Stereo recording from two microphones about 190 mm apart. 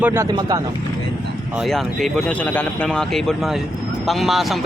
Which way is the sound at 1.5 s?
Centre (ahead or behind).